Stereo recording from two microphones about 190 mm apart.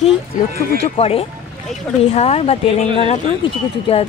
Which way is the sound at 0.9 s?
30° left (ahead or behind).